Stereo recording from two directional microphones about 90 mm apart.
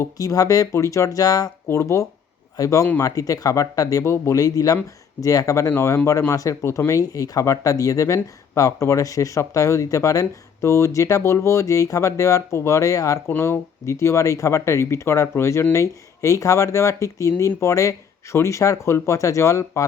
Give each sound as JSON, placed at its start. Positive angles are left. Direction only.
{"t": 0.0, "sound": "speech", "side_deg": 40}
{"t": 1.6, "sound": "speech", "side_deg": 30}